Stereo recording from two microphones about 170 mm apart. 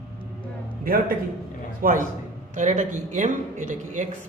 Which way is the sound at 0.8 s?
60° right (ahead or behind).